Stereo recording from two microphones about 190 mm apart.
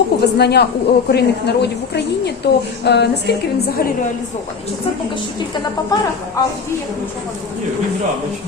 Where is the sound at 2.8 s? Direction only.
60° left (ahead or behind).